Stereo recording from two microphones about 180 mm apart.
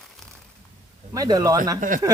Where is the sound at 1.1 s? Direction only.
20° right (ahead or behind).